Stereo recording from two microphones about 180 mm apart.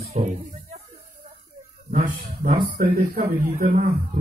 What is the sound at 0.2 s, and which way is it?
Speech, 40° right (ahead or behind).